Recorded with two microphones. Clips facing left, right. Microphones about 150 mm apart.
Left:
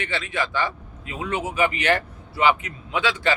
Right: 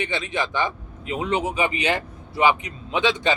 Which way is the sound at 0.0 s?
20° right (ahead or behind).